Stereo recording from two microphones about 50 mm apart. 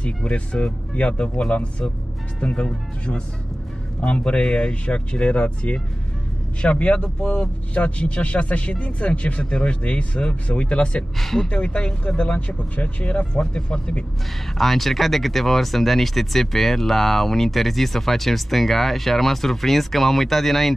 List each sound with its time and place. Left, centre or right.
0.0 s speech: left
11.1 s speech: centre
11.4 s speech: left
14.6 s speech: centre